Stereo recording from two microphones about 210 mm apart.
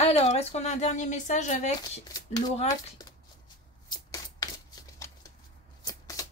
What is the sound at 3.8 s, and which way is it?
Shuffling cards, 20° left (ahead or behind).